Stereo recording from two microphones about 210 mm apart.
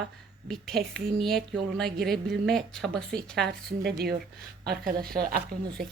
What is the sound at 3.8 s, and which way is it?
Speech, 50° right (ahead or behind).